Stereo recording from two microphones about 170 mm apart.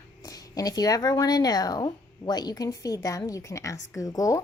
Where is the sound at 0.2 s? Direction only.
20° left (ahead or behind).